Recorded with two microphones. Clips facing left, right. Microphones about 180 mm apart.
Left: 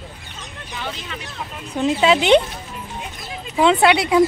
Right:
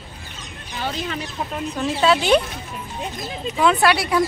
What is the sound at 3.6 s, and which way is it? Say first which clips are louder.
Speech: left 3 dB; 25° left (ahead or behind).